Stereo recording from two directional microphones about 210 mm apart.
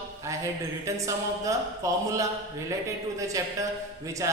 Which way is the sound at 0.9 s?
15° right (ahead or behind).